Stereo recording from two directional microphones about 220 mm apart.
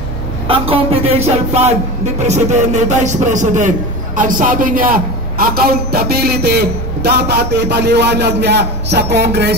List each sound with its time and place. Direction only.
0.5 s a man's voice: 25° right (ahead or behind); by 9.6 s 50° right (ahead or behind)